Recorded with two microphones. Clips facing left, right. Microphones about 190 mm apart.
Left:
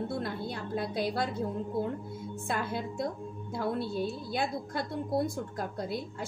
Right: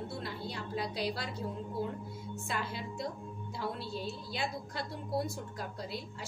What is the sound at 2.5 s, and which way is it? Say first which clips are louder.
A woman's voice: left 6 dB; 50° left (ahead or behind).